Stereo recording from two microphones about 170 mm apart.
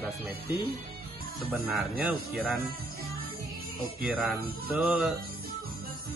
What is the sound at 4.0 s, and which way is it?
Speech, centre (ahead or behind).